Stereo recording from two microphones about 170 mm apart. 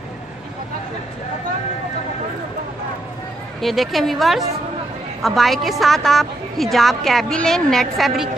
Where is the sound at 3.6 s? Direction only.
Centre (ahead or behind).